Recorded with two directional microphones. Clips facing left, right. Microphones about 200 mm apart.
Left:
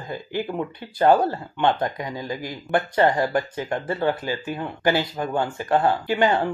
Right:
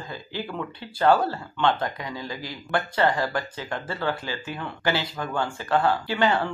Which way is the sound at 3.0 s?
20° left (ahead or behind).